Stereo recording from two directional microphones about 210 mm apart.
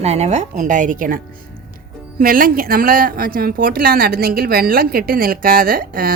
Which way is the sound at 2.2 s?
40° right (ahead or behind).